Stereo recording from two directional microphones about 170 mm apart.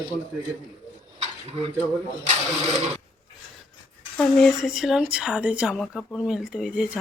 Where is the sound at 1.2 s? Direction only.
35° right (ahead or behind).